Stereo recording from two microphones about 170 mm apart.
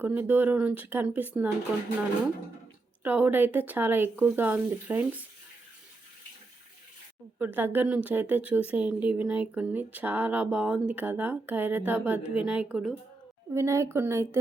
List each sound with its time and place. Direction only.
0.0 s a woman's voice: 10° right (ahead or behind)
3.0 s a woman's voice: 10° right (ahead or behind)
7.3 s a woman's voice: 10° right (ahead or behind)